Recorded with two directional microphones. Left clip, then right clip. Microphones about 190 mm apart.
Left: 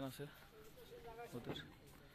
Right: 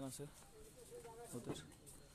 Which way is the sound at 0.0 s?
10° right (ahead or behind).